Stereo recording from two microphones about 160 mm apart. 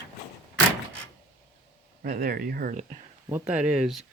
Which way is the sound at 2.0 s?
65° right (ahead or behind).